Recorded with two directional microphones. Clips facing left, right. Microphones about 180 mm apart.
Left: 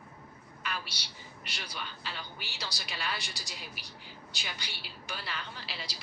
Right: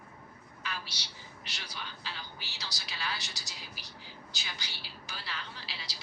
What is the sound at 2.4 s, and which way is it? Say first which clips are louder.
A woman's voice: left 4 dB; 60° left (ahead or behind).